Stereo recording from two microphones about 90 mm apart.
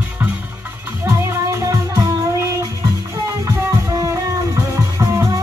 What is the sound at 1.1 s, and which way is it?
Music, 30° right (ahead or behind).